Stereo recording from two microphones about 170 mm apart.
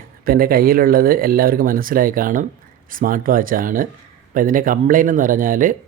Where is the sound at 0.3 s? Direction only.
60° right (ahead or behind).